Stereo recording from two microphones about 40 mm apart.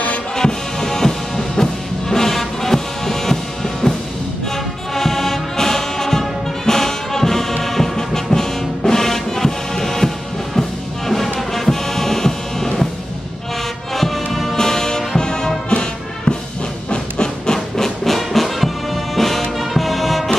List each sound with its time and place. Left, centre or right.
0.4 s music: centre
4.9 s brass instrument: centre
7.6 s music: centre
13.9 s music: centre; by 16.4 s left
16.9 s a sound: centre
17.8 s music: centre